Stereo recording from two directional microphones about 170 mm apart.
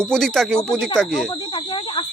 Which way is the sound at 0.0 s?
5° left (ahead or behind).